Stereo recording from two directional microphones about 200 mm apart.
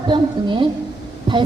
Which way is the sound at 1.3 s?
25° right (ahead or behind).